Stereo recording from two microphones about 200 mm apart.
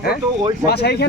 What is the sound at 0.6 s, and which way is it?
Speech, 55° left (ahead or behind).